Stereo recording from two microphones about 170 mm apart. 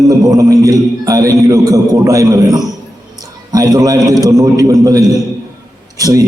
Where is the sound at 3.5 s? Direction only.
20° right (ahead or behind).